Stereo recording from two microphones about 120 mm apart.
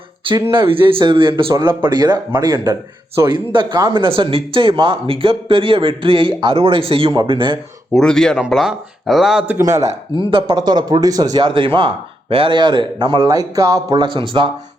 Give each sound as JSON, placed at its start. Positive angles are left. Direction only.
{"t": 0.5, "sound": "speech", "side_deg": -45}
{"t": 7.9, "sound": "speech", "side_deg": 5}
{"t": 9.6, "sound": "speech", "side_deg": -25}
{"t": 10.2, "sound": "speech", "side_deg": -50}
{"t": 10.6, "sound": "speech", "side_deg": -35}